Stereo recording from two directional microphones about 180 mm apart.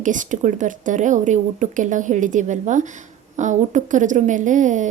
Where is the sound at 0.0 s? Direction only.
45° right (ahead or behind).